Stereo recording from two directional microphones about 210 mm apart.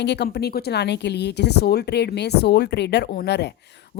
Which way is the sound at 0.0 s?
50° left (ahead or behind).